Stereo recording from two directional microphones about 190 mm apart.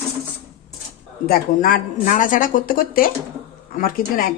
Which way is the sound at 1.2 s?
50° left (ahead or behind).